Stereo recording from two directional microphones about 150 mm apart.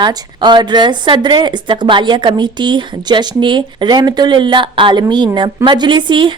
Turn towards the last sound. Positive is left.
turn(degrees=-30)  # may be behind; listen again after turning